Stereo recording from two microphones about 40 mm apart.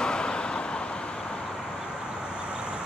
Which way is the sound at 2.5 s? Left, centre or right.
Right.